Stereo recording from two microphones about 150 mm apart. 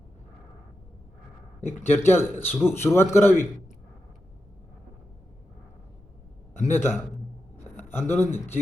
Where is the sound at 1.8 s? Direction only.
15° left (ahead or behind).